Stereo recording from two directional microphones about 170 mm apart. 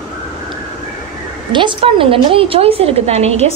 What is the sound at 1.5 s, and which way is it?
A woman's voice, 30° right (ahead or behind).